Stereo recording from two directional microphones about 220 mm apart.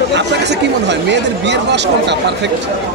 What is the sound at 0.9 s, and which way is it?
Speech, 50° right (ahead or behind).